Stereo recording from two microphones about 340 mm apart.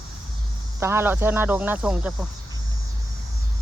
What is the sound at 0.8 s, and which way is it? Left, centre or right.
Speech, centre.